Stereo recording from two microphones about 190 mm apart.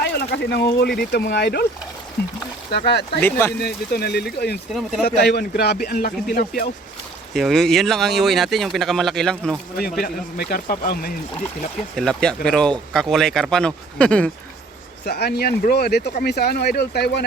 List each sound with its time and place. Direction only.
0.0 s a sound: 60° left (ahead or behind)
0.9 s speech: 60° left (ahead or behind)
2.7 s speech: 60° left (ahead or behind)
3.2 s speech: 10° left (ahead or behind)
3.6 s speech: 60° left (ahead or behind)
4.7 s speech: centre (ahead or behind)
5.0 s a man's voice: 60° left (ahead or behind)
7.3 s speech: centre (ahead or behind)
10.0 s a man's voice: 50° left (ahead or behind)
11.9 s speech: 5° left (ahead or behind)
15.0 s speech: 60° left (ahead or behind)